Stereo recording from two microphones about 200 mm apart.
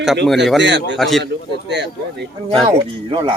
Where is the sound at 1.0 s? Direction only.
Centre (ahead or behind).